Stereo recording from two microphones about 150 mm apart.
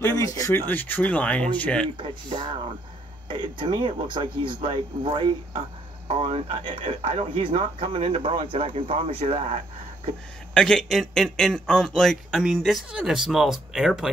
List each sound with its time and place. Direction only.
0.0 s speech: 20° left (ahead or behind)
2.0 s speech: 35° right (ahead or behind); by 9.6 s 50° right (ahead or behind)
10.5 s speech: 5° left (ahead or behind)